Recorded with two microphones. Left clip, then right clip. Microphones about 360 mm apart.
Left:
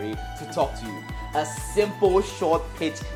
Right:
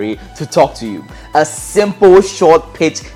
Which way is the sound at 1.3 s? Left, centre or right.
Right.